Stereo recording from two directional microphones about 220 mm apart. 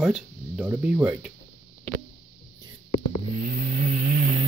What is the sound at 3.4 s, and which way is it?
Vehicle, 35° right (ahead or behind).